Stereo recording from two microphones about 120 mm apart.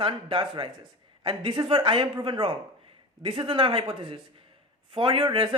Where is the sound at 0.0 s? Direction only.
45° right (ahead or behind).